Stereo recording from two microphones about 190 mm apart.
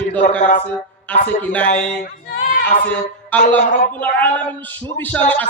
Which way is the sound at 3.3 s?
10° left (ahead or behind).